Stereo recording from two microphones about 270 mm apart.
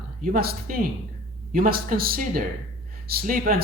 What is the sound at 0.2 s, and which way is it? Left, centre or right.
Speech, right.